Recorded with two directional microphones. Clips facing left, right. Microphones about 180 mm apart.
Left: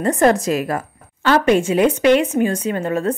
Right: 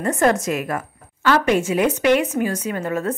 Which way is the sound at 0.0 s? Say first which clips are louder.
Left 3 dB; 35° left (ahead or behind).